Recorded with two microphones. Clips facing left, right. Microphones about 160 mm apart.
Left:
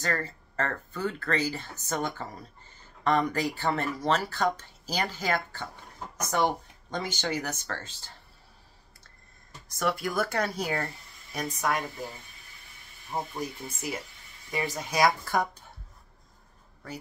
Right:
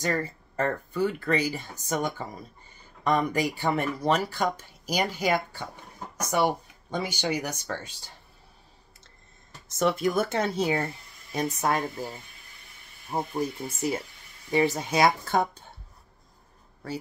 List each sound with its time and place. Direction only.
0.0 s speech: 15° right (ahead or behind)
9.7 s speech: 20° right (ahead or behind)
13.1 s speech: 10° right (ahead or behind)
14.5 s speech: 25° right (ahead or behind)